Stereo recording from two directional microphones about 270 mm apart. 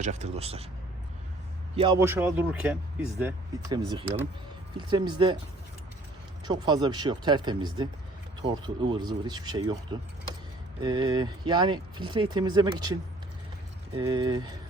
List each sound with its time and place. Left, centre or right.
0.0 s speech: right
1.7 s speech: centre
6.4 s speech: centre
10.8 s speech: centre